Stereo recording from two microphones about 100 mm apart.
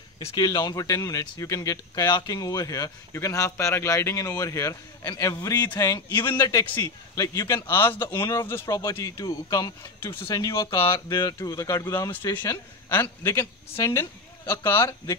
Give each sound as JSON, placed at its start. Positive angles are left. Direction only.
{"t": 0.4, "sound": "speech", "side_deg": 40}
{"t": 7.4, "sound": "a woman's voice", "side_deg": 25}
{"t": 8.0, "sound": "speech", "side_deg": 45}
{"t": 8.6, "sound": "a woman's voice", "side_deg": 35}